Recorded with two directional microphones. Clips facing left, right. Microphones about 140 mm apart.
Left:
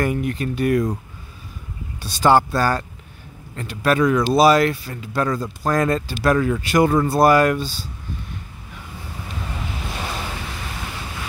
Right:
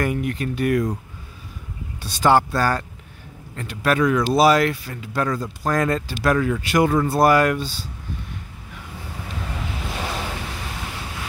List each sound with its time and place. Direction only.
0.0 s speech: 30° left (ahead or behind)
2.0 s speech: 35° left (ahead or behind)
9.9 s waves: 90° right